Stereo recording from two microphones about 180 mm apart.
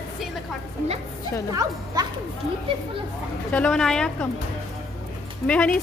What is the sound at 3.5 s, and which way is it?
Speech, 5° left (ahead or behind).